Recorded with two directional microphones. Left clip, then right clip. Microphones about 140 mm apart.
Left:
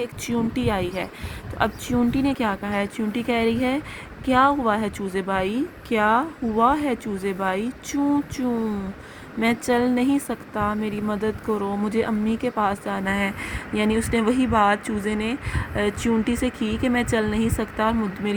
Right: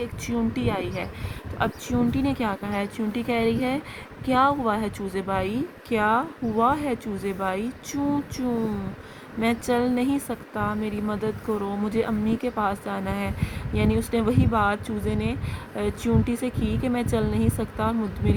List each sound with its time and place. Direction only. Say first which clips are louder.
0.0 s speech: left 2 dB; 30° left (ahead or behind)